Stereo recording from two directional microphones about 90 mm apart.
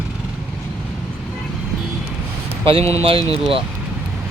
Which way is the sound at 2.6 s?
90° right.